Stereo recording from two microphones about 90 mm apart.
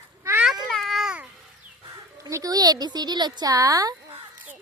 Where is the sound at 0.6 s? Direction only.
Centre (ahead or behind).